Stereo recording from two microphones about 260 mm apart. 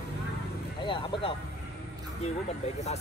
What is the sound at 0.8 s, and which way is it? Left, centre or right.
Speech, centre.